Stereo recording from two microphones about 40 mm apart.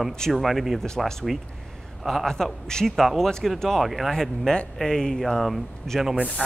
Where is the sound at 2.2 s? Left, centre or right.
Centre.